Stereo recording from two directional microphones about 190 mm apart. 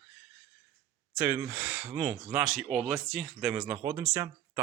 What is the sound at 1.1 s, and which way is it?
Speech, 10° right (ahead or behind).